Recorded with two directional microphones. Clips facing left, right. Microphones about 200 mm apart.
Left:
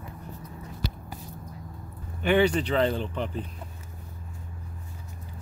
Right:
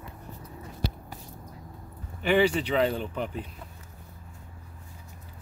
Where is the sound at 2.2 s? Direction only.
5° right (ahead or behind).